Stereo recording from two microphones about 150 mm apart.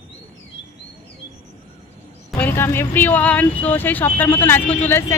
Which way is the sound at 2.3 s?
10° left (ahead or behind).